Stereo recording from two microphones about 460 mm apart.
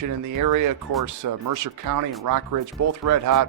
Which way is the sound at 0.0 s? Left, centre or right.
Right.